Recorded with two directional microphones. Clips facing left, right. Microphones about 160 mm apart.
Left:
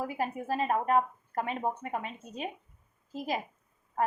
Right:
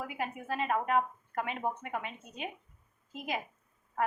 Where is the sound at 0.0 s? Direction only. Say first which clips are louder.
Left 5 dB; 35° left (ahead or behind).